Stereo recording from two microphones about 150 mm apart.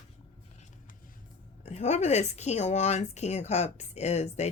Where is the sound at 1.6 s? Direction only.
45° left (ahead or behind).